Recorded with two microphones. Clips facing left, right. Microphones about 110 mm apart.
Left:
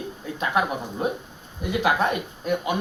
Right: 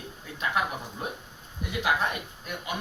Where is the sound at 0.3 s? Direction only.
65° left (ahead or behind).